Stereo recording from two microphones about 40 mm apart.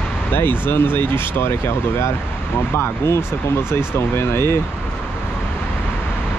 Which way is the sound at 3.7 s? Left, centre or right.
Left.